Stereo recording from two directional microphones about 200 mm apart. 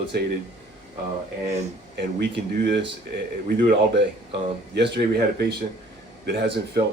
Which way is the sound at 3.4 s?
50° right (ahead or behind).